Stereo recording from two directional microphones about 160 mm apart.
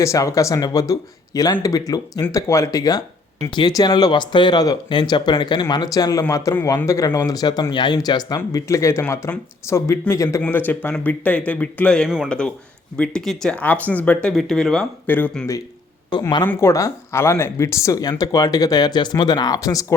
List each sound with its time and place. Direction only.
0.0 s speech: 20° left (ahead or behind)